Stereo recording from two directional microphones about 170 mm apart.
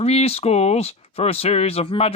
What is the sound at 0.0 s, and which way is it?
Speech, 40° left (ahead or behind).